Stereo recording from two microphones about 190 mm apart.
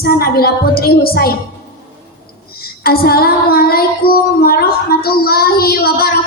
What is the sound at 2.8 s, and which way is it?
Child singing, 55° left (ahead or behind).